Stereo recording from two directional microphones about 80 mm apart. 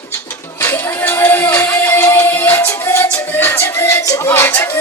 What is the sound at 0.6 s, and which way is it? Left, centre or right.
Music, left.